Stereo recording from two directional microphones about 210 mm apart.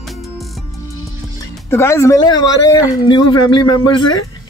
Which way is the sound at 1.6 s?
15° left (ahead or behind).